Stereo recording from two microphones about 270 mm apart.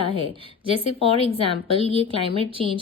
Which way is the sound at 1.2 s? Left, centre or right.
Left.